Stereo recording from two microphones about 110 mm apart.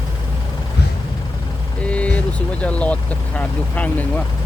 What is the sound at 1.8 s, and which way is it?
Speech, 10° left (ahead or behind).